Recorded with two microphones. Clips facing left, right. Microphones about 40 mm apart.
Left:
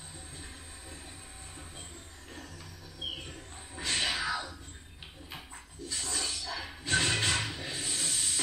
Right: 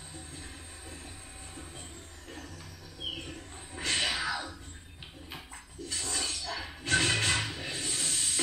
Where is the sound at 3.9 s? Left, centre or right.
Centre.